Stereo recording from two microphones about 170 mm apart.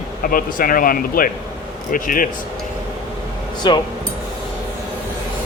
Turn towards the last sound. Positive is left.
turn(degrees=25)  # may be behind; listen again after turning